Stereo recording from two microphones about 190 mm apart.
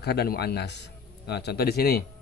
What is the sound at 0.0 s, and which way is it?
A man's voice, 60° left (ahead or behind).